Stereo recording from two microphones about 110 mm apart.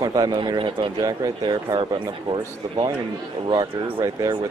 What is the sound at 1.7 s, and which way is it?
Speech, 45° right (ahead or behind).